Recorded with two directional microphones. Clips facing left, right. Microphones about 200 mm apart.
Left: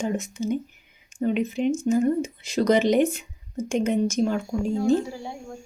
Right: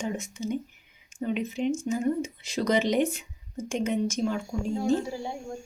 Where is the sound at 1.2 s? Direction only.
55° left (ahead or behind).